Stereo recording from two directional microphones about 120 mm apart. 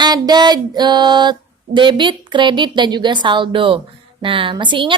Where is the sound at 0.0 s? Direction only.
35° right (ahead or behind).